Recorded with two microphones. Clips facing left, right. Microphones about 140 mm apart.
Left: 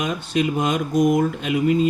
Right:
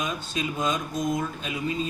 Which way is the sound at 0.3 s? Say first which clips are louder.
Left 7 dB; 65° left (ahead or behind).